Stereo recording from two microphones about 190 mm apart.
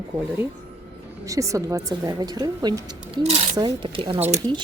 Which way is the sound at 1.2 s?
15° right (ahead or behind).